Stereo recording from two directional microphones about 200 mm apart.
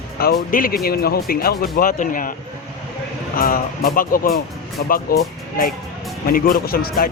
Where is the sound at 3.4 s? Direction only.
45° left (ahead or behind).